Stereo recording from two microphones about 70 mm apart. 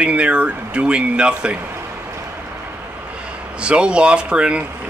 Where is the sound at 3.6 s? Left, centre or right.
Centre.